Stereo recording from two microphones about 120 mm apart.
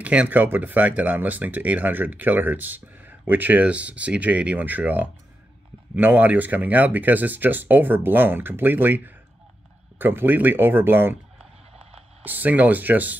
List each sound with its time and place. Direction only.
0.0 s speech: 10° right (ahead or behind)
11.7 s a sound: 55° right (ahead or behind)
12.3 s speech: 15° right (ahead or behind)